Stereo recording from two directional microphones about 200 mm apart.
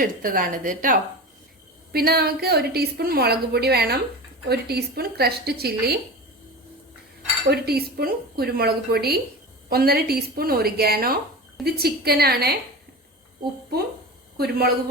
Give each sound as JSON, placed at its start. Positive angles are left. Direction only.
{"t": 0.0, "sound": "a woman's voice", "side_deg": -45}
{"t": 7.4, "sound": "a woman's voice", "side_deg": -50}
{"t": 14.3, "sound": "a woman's voice", "side_deg": -50}